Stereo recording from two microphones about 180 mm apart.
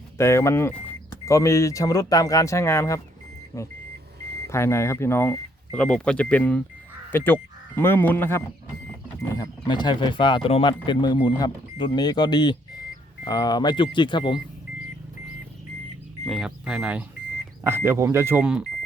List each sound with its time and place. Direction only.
0.2 s speech: 15° left (ahead or behind)
16.2 s speech: centre (ahead or behind)